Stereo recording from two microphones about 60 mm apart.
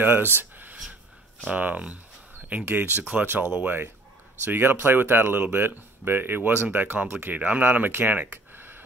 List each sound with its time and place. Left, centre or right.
0.0 s speech: right
0.4 s a sound: right
1.5 s speech: right